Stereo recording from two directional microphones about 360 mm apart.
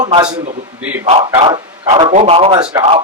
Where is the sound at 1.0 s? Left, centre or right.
Centre.